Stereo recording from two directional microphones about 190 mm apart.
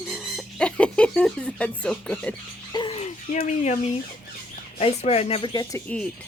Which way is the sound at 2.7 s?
30° left (ahead or behind).